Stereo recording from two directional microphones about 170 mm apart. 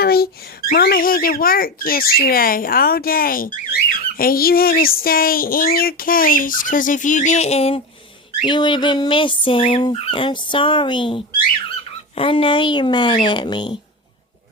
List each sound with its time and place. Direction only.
0.0 s speech: 65° left (ahead or behind); by 7.8 s 35° left (ahead or behind)
8.4 s fowl: 30° left (ahead or behind)